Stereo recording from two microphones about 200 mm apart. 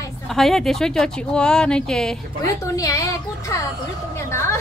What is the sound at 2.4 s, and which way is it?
A woman's voice, 15° left (ahead or behind).